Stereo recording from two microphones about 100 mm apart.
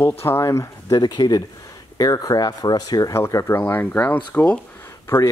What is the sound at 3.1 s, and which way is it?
Speech, 25° left (ahead or behind).